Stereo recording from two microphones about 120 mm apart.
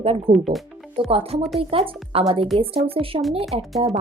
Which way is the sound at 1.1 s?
55° right (ahead or behind).